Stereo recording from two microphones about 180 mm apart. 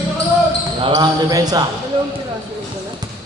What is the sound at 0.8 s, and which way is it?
Speech, 20° right (ahead or behind).